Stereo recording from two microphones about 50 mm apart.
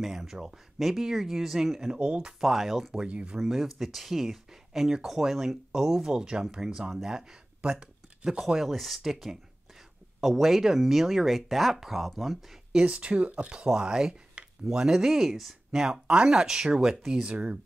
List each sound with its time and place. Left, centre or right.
0.0 s speech: centre
2.4 s speech: centre
3.0 s speech: right
3.3 s speech: centre
8.5 s speech: centre
12.7 s speech: right; by 17.2 s centre
17.2 s speech: right